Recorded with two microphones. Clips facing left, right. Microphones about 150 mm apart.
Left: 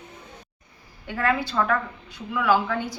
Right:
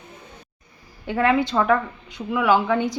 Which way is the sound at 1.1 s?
25° right (ahead or behind).